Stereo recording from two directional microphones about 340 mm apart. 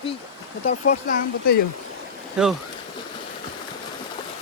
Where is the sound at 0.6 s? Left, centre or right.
Left.